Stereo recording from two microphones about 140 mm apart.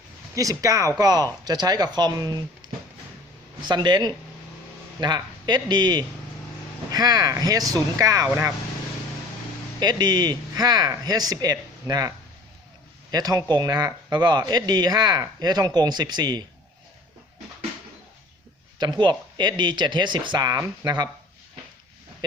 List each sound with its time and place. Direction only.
0.3 s speech: 25° right (ahead or behind)
3.6 s speech: 30° right (ahead or behind)
9.8 s speech: 30° right (ahead or behind)
18.8 s speech: 30° right (ahead or behind)